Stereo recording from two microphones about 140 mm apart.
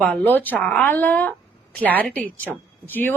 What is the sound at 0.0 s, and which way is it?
Speech, 10° left (ahead or behind).